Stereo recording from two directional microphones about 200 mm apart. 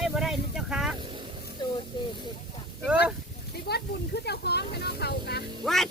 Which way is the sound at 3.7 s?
55° left (ahead or behind).